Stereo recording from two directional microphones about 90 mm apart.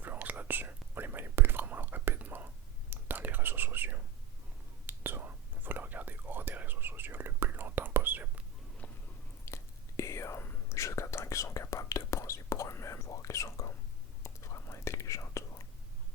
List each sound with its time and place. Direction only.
0.0 s whispering: 20° right (ahead or behind)
9.5 s whispering: 30° left (ahead or behind)